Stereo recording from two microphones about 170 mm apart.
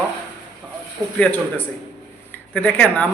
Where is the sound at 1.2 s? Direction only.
10° left (ahead or behind).